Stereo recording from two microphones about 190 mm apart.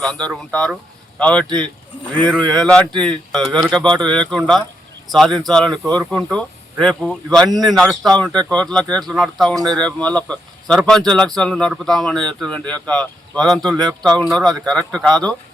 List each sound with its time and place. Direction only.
0.0 s speech: 5° left (ahead or behind)
9.6 s speech: 20° right (ahead or behind)
9.8 s speech: 5° left (ahead or behind)